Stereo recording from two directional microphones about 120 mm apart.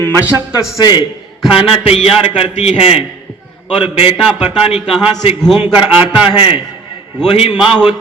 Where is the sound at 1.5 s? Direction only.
50° left (ahead or behind).